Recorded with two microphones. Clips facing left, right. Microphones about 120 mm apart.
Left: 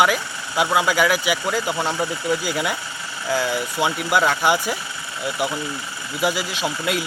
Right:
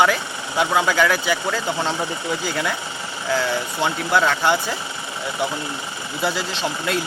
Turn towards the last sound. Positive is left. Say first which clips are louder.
# even
turn(degrees=10)  # may be behind; listen again after turning